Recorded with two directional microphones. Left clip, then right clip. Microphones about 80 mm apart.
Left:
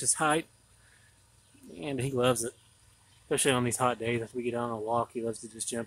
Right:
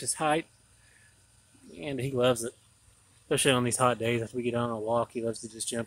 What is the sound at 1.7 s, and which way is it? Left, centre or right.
Speech, centre.